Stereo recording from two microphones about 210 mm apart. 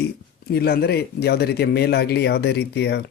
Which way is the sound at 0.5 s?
50° left (ahead or behind).